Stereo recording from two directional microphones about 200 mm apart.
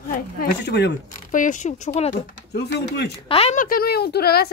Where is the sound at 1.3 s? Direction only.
40° left (ahead or behind).